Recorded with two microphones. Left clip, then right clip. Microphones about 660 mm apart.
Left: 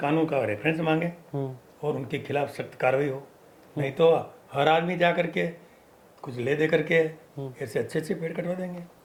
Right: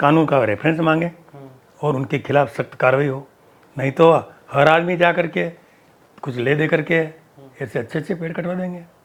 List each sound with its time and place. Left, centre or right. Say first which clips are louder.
0.0 s speech: right 10 dB; right
6.2 s speech: right 7 dB; right